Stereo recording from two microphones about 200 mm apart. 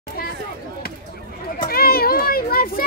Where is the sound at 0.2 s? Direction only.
50° left (ahead or behind).